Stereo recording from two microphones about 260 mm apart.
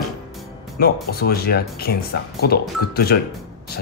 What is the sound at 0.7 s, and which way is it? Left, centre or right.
Speech, left.